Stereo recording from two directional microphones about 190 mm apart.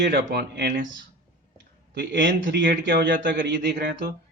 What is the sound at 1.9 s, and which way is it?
A man's voice, 70° right (ahead or behind).